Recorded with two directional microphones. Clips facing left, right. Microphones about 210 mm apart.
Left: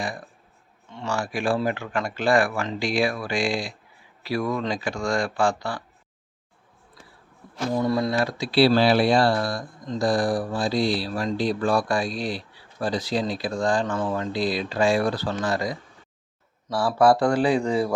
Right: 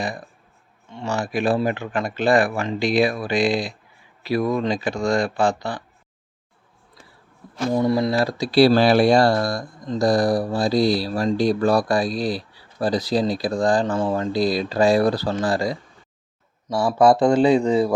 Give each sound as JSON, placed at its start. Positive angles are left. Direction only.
{"t": 0.9, "sound": "speech", "side_deg": -20}
{"t": 7.8, "sound": "speech", "side_deg": -20}
{"t": 8.1, "sound": "speech", "side_deg": -35}